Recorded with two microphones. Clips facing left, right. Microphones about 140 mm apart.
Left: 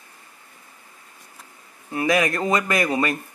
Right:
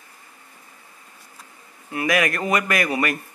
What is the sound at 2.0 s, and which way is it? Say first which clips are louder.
Speech: left 1 dB; 25° left (ahead or behind).